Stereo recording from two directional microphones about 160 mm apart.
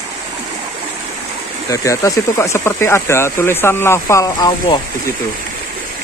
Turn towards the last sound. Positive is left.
turn(degrees=25)  # may be behind; listen again after turning